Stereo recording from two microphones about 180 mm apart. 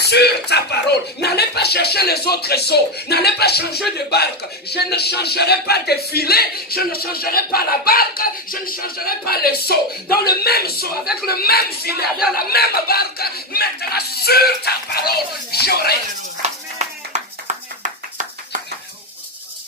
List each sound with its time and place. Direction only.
0.0 s speech: 65° left (ahead or behind)
16.4 s music: 40° right (ahead or behind)